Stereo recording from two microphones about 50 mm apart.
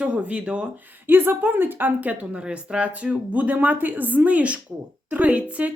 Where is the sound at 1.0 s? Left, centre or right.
Right.